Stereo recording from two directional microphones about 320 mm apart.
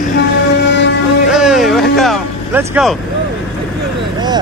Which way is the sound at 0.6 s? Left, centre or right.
Left.